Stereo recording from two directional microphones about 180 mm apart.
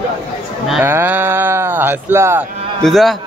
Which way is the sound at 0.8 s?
10° right (ahead or behind).